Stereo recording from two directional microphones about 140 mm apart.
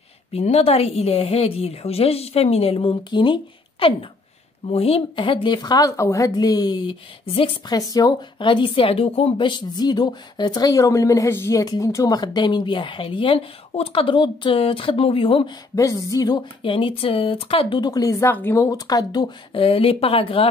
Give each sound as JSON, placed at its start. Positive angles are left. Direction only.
{"t": 0.3, "sound": "a woman's voice", "side_deg": 45}
{"t": 15.7, "sound": "speech", "side_deg": 25}
{"t": 19.5, "sound": "a woman's voice", "side_deg": 40}